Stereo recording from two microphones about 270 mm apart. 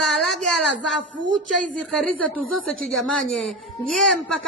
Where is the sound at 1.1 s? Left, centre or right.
Right.